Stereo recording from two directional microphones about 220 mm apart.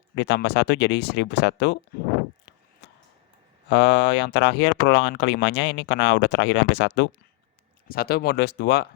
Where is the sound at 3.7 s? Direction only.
50° left (ahead or behind).